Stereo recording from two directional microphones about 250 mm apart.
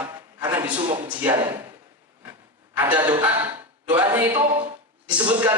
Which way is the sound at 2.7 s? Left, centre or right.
Centre.